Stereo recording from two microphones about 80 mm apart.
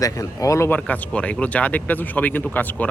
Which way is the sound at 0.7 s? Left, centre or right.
Centre.